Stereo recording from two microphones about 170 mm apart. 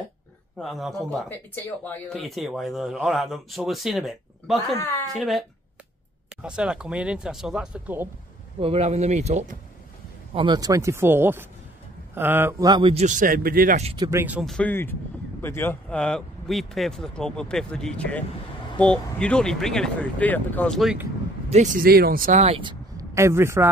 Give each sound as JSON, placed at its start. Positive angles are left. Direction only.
{"t": 0.6, "sound": "speech", "side_deg": 0}
{"t": 6.4, "sound": "speech", "side_deg": -5}
{"t": 8.5, "sound": "speech", "side_deg": -35}
{"t": 10.3, "sound": "speech", "side_deg": -25}
{"t": 12.9, "sound": "speech", "side_deg": -45}
{"t": 13.9, "sound": "speech", "side_deg": -25}
{"t": 14.4, "sound": "speech", "side_deg": 0}
{"t": 14.7, "sound": "speech", "side_deg": 10}
{"t": 21.5, "sound": "speech", "side_deg": -45}
{"t": 22.6, "sound": "a sound", "side_deg": -25}
{"t": 23.1, "sound": "speech", "side_deg": -15}